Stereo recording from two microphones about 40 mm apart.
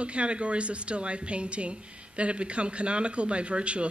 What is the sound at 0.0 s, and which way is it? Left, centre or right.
Speech, right.